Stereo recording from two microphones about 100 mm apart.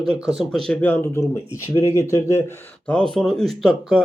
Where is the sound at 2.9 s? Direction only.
5° left (ahead or behind).